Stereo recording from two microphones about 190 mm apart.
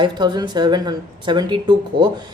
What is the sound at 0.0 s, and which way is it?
A woman's voice, 25° right (ahead or behind).